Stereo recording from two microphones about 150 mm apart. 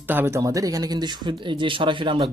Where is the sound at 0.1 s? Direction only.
15° right (ahead or behind).